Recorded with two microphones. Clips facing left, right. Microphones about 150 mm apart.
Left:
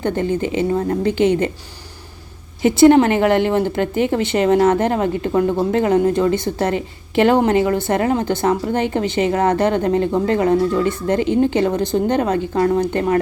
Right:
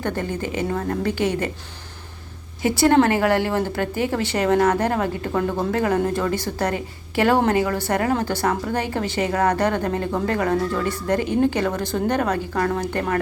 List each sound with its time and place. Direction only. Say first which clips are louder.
0.0 s a woman's voice: left 6 dB; 20° left (ahead or behind)
2.6 s a woman's voice: left 6 dB; 20° left (ahead or behind)